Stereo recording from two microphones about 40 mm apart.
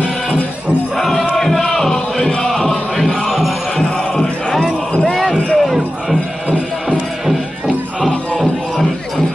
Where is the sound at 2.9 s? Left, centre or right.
Centre.